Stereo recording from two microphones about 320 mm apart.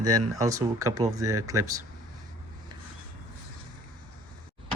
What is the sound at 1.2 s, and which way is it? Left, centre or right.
Speech, right.